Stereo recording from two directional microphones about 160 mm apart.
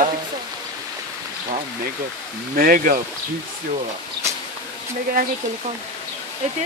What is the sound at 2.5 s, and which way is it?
Speech, 60° right (ahead or behind).